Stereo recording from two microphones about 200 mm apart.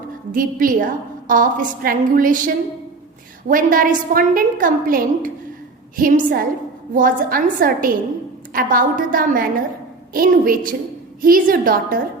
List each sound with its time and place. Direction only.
0.3 s a woman's voice: 45° right (ahead or behind)